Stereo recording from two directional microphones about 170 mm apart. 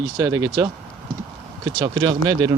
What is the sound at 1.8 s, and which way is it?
Speech, 20° right (ahead or behind).